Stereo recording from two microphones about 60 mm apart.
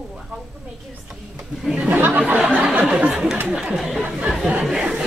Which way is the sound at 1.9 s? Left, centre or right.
Right.